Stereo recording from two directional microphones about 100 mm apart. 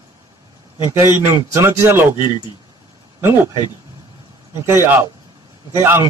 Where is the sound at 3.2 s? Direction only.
20° right (ahead or behind).